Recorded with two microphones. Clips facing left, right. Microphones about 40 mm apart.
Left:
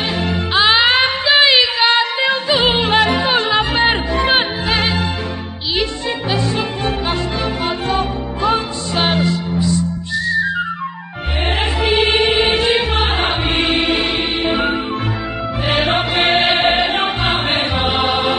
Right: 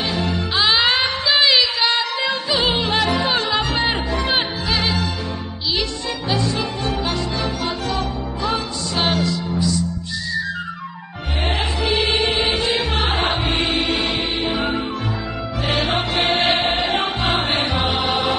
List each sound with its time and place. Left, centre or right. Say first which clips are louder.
0.1 s music: left 4 dB; left
6.3 s music: even; left
11.4 s music: left 4 dB; centre
16.8 s music: left 3 dB; centre